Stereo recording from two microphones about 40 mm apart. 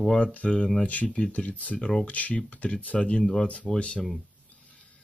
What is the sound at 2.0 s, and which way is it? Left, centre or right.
Speech, left.